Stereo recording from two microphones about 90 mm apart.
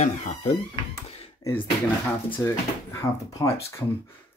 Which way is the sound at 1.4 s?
40° left (ahead or behind).